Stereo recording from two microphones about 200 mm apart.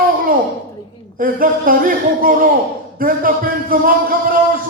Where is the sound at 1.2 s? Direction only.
45° right (ahead or behind).